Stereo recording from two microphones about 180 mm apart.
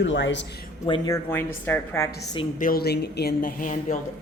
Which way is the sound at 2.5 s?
50° left (ahead or behind).